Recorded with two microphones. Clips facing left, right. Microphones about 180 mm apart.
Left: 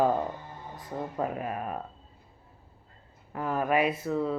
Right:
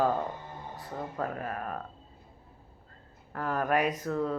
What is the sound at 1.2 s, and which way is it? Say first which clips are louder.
Speech: left 3 dB; 10° left (ahead or behind).